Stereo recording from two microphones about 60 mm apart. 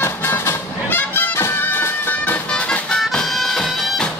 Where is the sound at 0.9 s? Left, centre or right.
Left.